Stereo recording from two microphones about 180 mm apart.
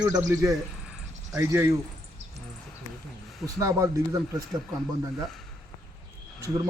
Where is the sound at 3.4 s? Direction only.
15° right (ahead or behind).